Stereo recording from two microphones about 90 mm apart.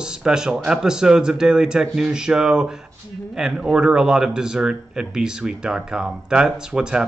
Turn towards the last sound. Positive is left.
turn(degrees=-10)  # may be behind; listen again after turning